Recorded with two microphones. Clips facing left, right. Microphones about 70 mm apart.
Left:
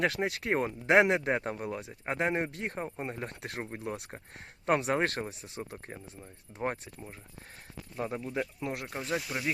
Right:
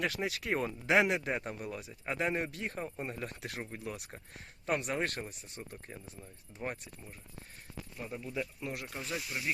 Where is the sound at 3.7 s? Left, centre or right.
Left.